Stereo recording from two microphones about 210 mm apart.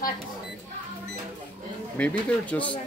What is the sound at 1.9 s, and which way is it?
Speech, 5° left (ahead or behind).